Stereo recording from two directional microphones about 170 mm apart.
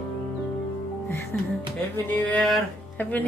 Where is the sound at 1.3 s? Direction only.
10° left (ahead or behind).